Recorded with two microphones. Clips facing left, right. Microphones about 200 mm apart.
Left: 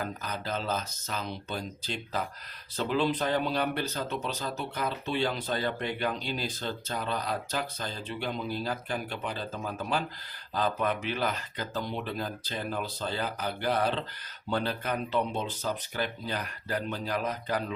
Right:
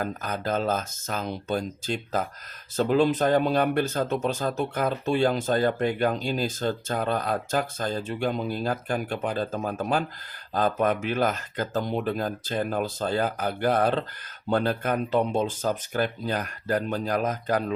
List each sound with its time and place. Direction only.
0.0 s speech: 50° right (ahead or behind)